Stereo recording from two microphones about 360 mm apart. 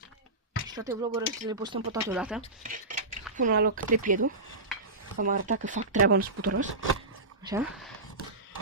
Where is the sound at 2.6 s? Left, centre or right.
Right.